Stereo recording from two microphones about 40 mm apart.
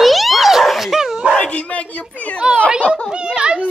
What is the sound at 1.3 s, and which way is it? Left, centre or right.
Dog, left.